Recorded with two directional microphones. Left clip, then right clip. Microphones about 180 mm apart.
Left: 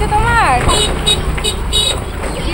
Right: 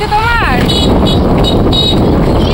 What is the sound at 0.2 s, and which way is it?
Vehicle, 20° right (ahead or behind).